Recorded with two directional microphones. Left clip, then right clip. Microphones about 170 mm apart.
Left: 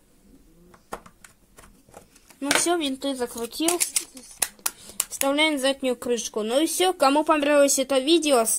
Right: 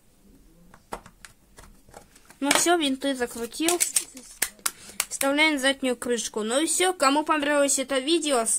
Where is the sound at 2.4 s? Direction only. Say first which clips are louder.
Right 1 dB; 15° right (ahead or behind).